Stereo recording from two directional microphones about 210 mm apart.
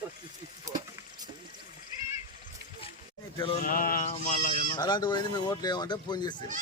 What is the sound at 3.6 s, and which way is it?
Speech, 40° left (ahead or behind).